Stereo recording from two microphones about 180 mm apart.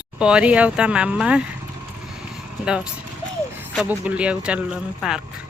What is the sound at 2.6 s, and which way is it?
Speech, 5° right (ahead or behind).